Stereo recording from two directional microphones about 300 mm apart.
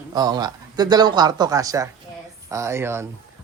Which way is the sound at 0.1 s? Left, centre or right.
Centre.